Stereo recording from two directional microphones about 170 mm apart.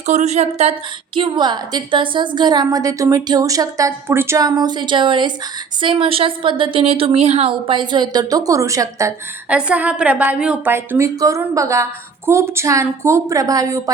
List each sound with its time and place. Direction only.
0.0 s a woman's voice: 40° right (ahead or behind); by 9.1 s 20° right (ahead or behind)
9.5 s a woman's voice: 5° right (ahead or behind)